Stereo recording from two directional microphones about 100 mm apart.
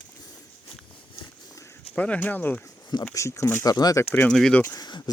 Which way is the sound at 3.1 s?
30° left (ahead or behind).